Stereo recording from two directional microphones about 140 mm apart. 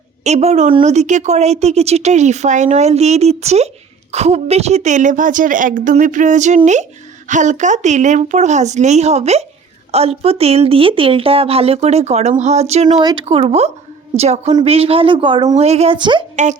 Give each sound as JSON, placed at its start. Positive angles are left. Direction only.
{"t": 0.3, "sound": "a woman's voice", "side_deg": -50}
{"t": 13.0, "sound": "speech", "side_deg": -30}
{"t": 13.2, "sound": "speech", "side_deg": -45}
{"t": 15.5, "sound": "speech", "side_deg": -50}
{"t": 16.0, "sound": "speech", "side_deg": -35}
{"t": 16.3, "sound": "speech", "side_deg": -60}